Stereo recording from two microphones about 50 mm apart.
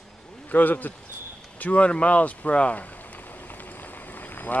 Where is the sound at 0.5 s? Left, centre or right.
Left.